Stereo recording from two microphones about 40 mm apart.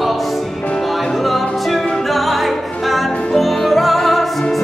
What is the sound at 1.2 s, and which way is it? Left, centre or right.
Music, centre.